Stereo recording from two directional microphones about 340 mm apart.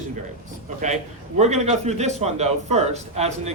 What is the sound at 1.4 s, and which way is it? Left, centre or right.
A man's voice, centre.